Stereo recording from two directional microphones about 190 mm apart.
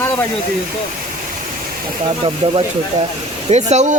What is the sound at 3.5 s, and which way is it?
Speech, 35° right (ahead or behind).